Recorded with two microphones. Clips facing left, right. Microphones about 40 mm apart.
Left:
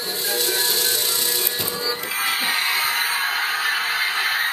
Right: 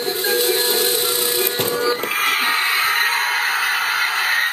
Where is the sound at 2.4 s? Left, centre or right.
Right.